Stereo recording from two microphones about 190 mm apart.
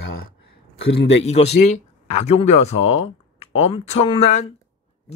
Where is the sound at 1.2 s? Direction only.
35° left (ahead or behind).